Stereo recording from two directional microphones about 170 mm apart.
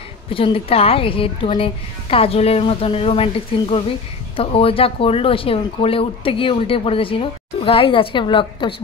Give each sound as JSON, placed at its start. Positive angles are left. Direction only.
{"t": 0.3, "sound": "speech", "side_deg": 35}